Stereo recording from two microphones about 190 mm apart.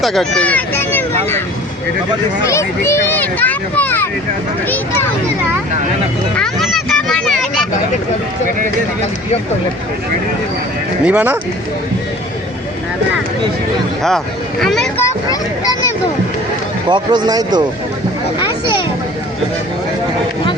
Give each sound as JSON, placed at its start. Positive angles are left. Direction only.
{"t": 0.0, "sound": "a child's voice", "side_deg": 0}
{"t": 2.5, "sound": "a child's voice", "side_deg": 15}
{"t": 6.3, "sound": "a sound", "side_deg": 0}
{"t": 11.0, "sound": "speech", "side_deg": -10}
{"t": 14.6, "sound": "speech", "side_deg": 0}
{"t": 15.0, "sound": "speech", "side_deg": 20}
{"t": 16.9, "sound": "speech", "side_deg": -25}